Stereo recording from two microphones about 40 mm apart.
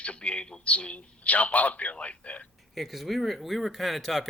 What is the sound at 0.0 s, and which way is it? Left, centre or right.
A man's voice, left.